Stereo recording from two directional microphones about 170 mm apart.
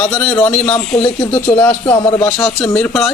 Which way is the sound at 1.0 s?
30° left (ahead or behind).